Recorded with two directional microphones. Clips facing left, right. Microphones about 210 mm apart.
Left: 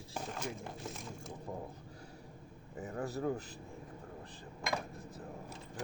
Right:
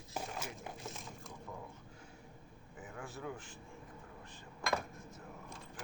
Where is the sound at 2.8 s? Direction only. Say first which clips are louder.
Left 9 dB; 40° left (ahead or behind).